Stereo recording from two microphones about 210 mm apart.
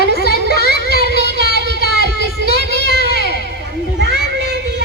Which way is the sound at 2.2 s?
55° right (ahead or behind).